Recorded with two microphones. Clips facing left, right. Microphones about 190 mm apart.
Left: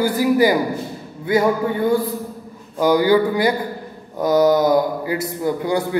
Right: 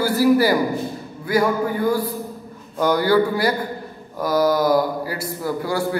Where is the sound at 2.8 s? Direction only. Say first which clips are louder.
Left 2 dB; 15° left (ahead or behind).